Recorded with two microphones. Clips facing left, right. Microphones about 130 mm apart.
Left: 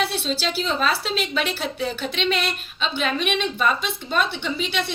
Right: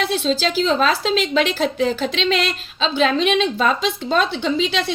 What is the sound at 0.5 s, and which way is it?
A woman's voice, 90° right.